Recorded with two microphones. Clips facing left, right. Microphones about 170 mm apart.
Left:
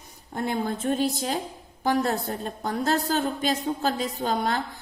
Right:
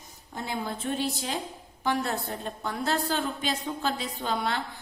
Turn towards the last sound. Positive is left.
turn(degrees=40)  # may be behind; listen again after turning